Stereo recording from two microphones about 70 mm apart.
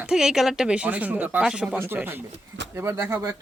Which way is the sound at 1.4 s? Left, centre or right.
Centre.